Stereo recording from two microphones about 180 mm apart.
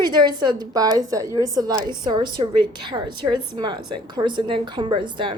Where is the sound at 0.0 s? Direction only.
25° right (ahead or behind).